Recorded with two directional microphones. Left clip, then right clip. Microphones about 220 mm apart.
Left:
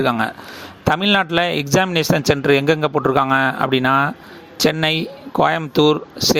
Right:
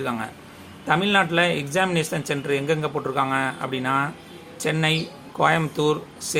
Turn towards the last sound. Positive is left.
turn(degrees=35)  # may be behind; listen again after turning